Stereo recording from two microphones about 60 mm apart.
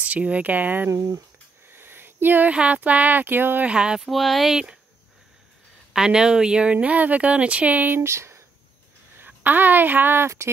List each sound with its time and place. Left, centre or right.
0.0 s speech: right
0.9 s speech: right
1.7 s a sound: right
2.5 s speech: right
3.6 s speech: centre
4.1 s speech: centre
5.9 s speech: centre; by 8.0 s right
8.0 s speech: right
9.2 s a woman's voice: right